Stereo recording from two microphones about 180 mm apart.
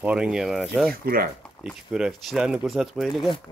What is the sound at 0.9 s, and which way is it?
Speech, 55° right (ahead or behind).